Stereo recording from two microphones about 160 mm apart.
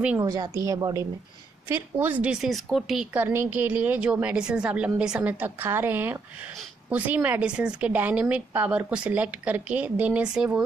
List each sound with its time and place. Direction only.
0.2 s a woman's voice: 20° right (ahead or behind)